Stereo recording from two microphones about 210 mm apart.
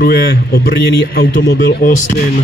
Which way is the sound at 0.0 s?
45° left (ahead or behind).